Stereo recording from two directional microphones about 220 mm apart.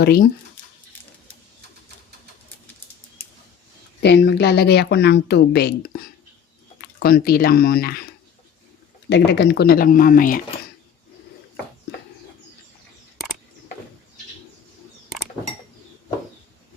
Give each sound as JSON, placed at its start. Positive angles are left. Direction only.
{"t": 0.0, "sound": "speech", "side_deg": 45}
{"t": 4.0, "sound": "speech", "side_deg": 50}
{"t": 7.0, "sound": "speech", "side_deg": 45}
{"t": 9.0, "sound": "speech", "side_deg": 50}